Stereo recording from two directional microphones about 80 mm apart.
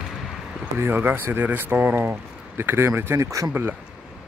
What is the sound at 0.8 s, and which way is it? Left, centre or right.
Speech, right.